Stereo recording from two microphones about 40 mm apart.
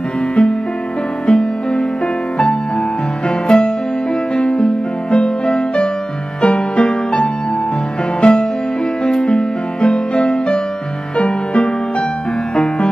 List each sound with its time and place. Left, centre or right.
0.4 s music: left
3.3 s music: left